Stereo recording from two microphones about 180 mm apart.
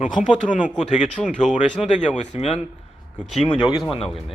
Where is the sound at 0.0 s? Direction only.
45° left (ahead or behind).